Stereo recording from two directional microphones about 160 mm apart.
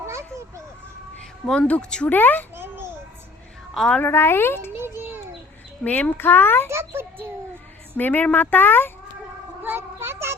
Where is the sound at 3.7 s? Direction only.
Centre (ahead or behind).